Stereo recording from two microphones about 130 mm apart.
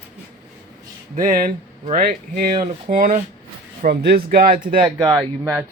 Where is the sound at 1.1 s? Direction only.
90° right.